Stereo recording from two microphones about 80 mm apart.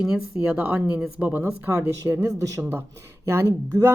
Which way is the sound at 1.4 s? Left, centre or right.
Right.